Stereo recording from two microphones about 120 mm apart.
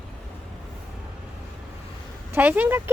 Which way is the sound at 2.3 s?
15° right (ahead or behind).